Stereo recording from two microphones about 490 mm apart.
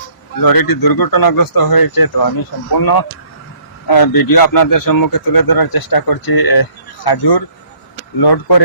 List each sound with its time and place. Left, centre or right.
0.4 s speech: left